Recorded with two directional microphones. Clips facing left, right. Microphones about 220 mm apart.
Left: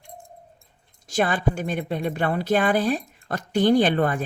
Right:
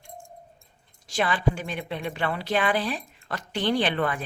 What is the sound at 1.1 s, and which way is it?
A woman's voice, 45° left (ahead or behind).